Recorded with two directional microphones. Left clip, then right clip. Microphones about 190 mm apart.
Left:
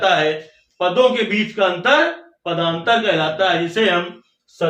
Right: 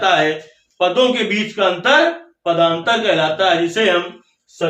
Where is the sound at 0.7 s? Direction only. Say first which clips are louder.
Even; 30° right (ahead or behind).